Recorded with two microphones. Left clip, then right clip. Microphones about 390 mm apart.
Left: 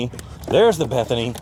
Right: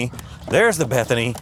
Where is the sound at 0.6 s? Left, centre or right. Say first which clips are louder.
Left 1 dB; right.